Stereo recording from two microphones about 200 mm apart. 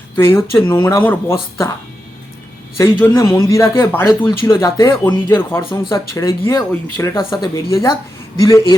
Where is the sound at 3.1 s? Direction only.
15° left (ahead or behind).